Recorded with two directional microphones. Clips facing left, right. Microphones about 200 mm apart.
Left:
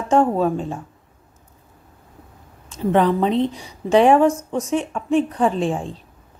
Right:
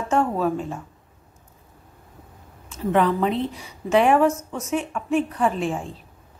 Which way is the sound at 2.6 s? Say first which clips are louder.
Left 3 dB; 30° left (ahead or behind).